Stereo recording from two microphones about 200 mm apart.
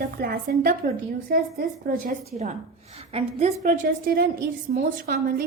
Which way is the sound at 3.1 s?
30° right (ahead or behind).